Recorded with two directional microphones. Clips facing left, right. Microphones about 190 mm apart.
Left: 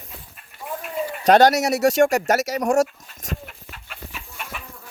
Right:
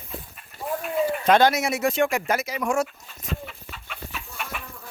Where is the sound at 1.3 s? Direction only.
40° left (ahead or behind).